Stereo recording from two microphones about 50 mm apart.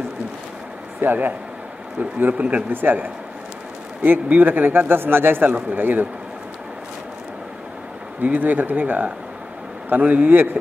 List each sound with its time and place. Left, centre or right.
1.0 s speech: right
2.7 s speech: right
8.2 s speech: right